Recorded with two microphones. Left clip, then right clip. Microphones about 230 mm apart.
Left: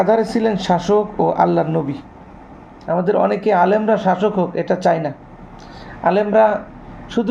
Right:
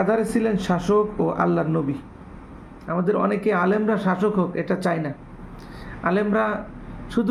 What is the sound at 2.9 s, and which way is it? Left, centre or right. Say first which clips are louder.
Speech: left 6 dB; centre.